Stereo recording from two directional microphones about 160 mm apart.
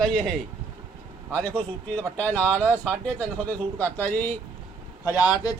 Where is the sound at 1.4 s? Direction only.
10° left (ahead or behind).